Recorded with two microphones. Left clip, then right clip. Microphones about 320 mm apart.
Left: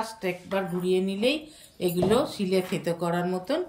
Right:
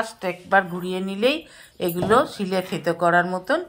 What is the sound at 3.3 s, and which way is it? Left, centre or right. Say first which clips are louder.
Speech: right 6 dB; centre.